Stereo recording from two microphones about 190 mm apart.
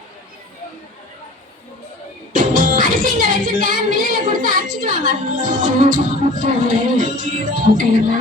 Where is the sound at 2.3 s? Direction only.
45° right (ahead or behind).